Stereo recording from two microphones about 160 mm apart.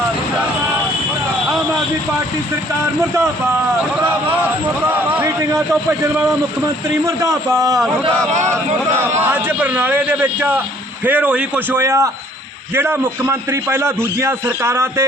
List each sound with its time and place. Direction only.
4.0 s a man's voice: 10° right (ahead or behind)
7.0 s a man's voice: 20° right (ahead or behind)
9.0 s a man's voice: 15° right (ahead or behind)